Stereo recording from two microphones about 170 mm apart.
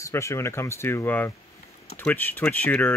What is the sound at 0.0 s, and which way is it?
Speech, 15° left (ahead or behind).